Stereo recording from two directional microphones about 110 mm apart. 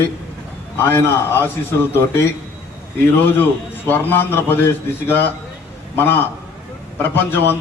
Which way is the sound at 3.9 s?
20° left (ahead or behind).